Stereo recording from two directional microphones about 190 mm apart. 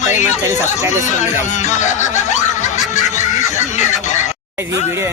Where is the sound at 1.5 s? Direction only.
40° left (ahead or behind).